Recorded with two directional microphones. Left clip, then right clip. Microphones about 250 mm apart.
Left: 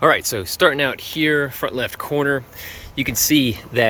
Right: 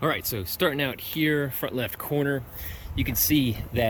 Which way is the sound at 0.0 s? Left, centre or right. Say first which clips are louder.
Left 11 dB; centre.